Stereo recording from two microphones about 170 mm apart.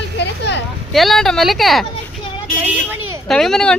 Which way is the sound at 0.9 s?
Centre (ahead or behind).